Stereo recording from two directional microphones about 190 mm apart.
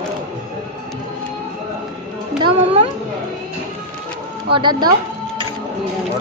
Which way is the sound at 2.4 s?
30° right (ahead or behind).